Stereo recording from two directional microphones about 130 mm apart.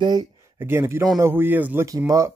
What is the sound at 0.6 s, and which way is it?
Speech, 20° right (ahead or behind).